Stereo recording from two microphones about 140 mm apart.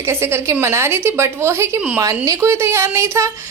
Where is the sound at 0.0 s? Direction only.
20° right (ahead or behind).